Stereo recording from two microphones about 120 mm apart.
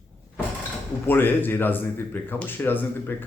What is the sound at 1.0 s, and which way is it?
Speech, 15° left (ahead or behind).